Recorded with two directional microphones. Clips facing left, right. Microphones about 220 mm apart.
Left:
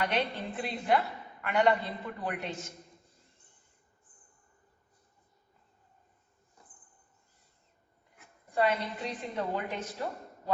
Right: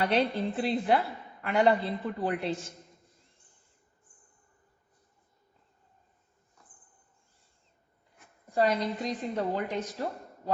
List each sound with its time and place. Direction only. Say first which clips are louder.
0.0 s a woman's voice: right 5 dB; 35° right (ahead or behind)
8.5 s a woman's voice: right 3 dB; 40° right (ahead or behind)